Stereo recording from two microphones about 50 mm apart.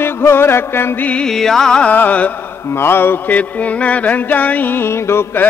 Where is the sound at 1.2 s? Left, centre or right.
Centre.